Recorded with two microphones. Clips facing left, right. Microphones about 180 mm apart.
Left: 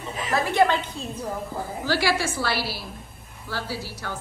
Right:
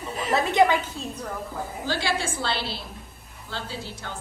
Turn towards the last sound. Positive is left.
turn(degrees=-20)  # may be behind; listen again after turning